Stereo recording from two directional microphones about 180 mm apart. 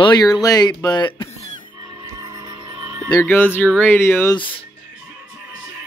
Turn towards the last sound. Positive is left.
turn(degrees=30)  # may be behind; listen again after turning